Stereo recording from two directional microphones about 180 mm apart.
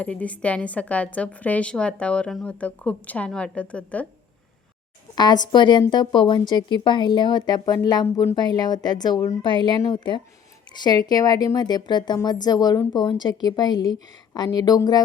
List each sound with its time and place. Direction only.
0.0 s a woman's voice: 5° left (ahead or behind)
5.1 s a woman's voice: 25° left (ahead or behind)